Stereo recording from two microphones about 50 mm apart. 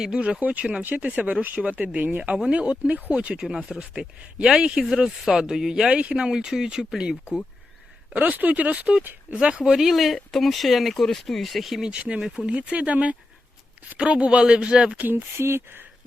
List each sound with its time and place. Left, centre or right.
0.0 s speech: centre
8.1 s speech: right; by 11.8 s centre
11.8 s speech: right
14.9 s speech: right
15.4 s speech: right